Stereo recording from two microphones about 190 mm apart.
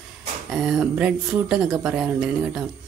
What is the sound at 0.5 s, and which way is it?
Speech, 5° right (ahead or behind).